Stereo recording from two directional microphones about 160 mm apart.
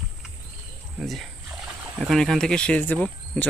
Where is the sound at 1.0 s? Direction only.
Centre (ahead or behind).